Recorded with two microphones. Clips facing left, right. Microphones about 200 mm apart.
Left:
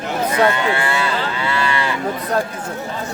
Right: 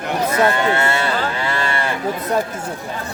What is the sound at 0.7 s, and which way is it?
Cattle, 45° right (ahead or behind).